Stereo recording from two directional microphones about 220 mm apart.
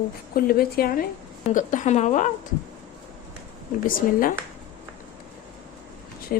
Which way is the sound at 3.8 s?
40° left (ahead or behind).